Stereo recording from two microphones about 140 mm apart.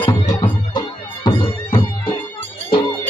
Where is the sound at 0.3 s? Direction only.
35° left (ahead or behind).